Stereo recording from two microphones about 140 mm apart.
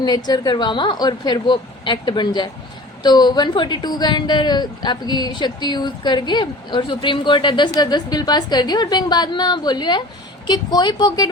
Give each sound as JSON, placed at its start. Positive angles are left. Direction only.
{"t": 0.3, "sound": "speech", "side_deg": 30}